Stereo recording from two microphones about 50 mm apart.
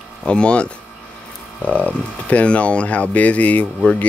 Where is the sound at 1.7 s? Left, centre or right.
Left.